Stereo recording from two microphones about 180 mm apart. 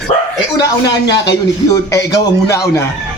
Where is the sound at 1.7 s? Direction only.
15° left (ahead or behind).